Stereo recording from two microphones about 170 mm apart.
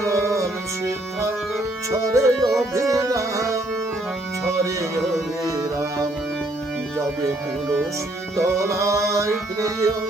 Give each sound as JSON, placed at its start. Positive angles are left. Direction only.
{"t": 2.1, "sound": "music", "side_deg": -20}
{"t": 5.5, "sound": "music", "side_deg": -15}
{"t": 8.4, "sound": "music", "side_deg": -15}